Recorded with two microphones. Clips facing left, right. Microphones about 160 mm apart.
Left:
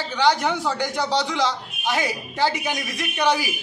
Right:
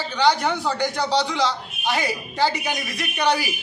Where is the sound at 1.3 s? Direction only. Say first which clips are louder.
Even; 15° left (ahead or behind).